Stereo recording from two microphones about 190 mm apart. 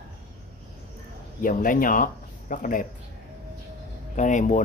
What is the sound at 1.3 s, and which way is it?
Speech, 45° left (ahead or behind).